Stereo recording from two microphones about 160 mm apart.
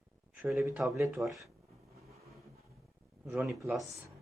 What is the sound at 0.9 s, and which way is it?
Speech, 20° right (ahead or behind).